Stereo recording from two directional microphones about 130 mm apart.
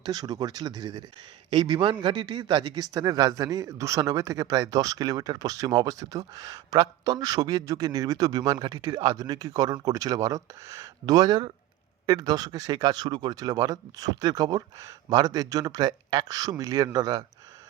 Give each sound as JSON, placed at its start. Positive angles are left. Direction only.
{"t": 0.0, "sound": "a man's voice", "side_deg": -30}